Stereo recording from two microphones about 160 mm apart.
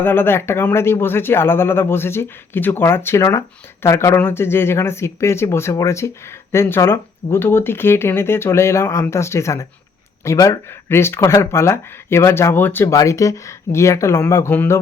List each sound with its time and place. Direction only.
0.0 s speech: 15° left (ahead or behind)